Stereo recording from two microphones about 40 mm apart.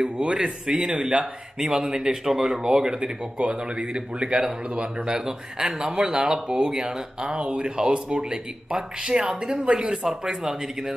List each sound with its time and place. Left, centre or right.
0.0 s speech: right
1.8 s speech: right
2.0 s speech: centre